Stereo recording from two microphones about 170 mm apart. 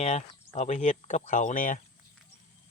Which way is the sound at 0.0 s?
40° left (ahead or behind).